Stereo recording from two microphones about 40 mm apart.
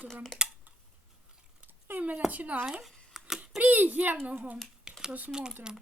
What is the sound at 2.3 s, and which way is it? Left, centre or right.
Speech, right.